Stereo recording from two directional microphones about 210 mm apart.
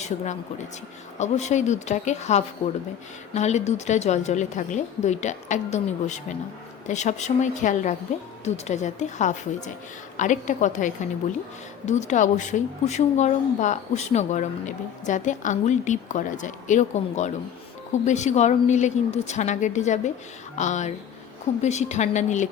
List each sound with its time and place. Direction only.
1.2 s a woman's voice: 35° left (ahead or behind)